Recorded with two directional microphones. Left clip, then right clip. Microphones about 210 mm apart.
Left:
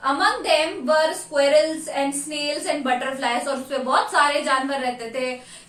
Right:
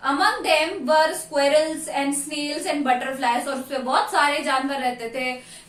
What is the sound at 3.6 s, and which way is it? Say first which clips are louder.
A woman's voice: left 1 dB; 15° left (ahead or behind).